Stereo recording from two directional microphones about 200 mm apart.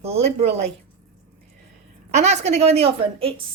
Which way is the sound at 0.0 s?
30° right (ahead or behind).